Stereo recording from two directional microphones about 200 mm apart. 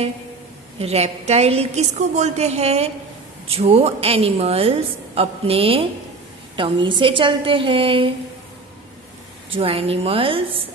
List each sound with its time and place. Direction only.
0.7 s a woman's voice: 30° right (ahead or behind)
9.5 s a woman's voice: 30° right (ahead or behind)